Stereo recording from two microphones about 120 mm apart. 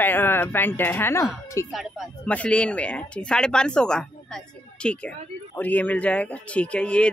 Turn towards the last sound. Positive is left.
turn(degrees=10)  # may be behind; listen again after turning